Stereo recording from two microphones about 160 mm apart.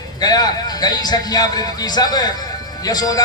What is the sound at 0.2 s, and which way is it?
A man's voice, 25° left (ahead or behind).